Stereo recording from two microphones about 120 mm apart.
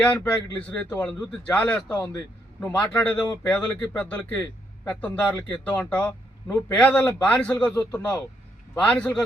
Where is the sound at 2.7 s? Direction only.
10° left (ahead or behind).